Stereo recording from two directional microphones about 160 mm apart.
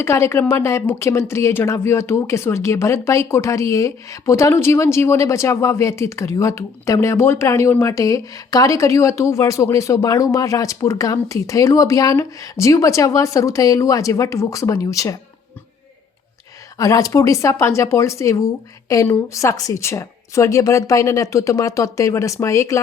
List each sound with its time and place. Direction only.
0.0 s a woman's voice: 15° left (ahead or behind)
16.7 s a woman's voice: 20° left (ahead or behind)